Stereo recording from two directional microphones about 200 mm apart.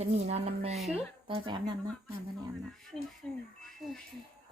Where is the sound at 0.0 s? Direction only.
30° right (ahead or behind).